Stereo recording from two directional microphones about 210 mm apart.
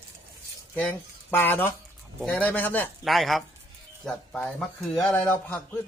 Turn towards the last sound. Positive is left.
turn(degrees=0)  # may be behind; listen again after turning